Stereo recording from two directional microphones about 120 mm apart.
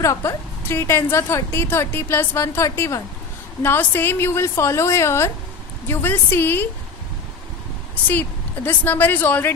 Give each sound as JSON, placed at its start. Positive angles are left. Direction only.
{"t": 0.0, "sound": "a woman's voice", "side_deg": 25}
{"t": 8.1, "sound": "a woman's voice", "side_deg": 15}